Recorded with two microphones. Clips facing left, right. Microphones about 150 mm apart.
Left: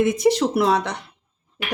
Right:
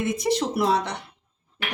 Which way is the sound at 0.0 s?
85° left.